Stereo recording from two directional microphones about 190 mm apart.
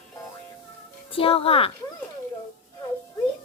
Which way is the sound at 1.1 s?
30° left (ahead or behind).